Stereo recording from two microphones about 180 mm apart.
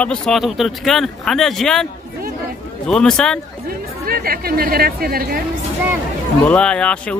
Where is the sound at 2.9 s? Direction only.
5° left (ahead or behind).